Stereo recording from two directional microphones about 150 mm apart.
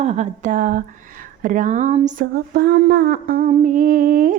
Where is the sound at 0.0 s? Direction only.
50° right (ahead or behind).